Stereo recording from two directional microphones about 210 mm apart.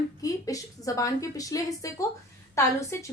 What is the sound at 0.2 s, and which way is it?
A woman's voice, 15° left (ahead or behind).